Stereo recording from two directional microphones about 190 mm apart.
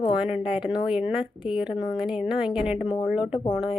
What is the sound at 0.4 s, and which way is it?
Speech, 25° left (ahead or behind).